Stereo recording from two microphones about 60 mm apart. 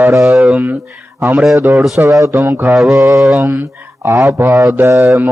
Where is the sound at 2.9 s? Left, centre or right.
Right.